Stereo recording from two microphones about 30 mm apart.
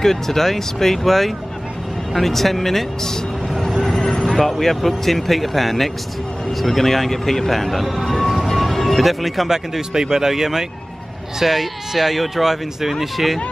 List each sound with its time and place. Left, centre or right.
0.0 s speech: centre
9.5 s speech: centre